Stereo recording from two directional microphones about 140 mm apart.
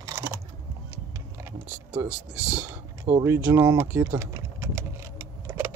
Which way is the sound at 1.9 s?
10° right (ahead or behind).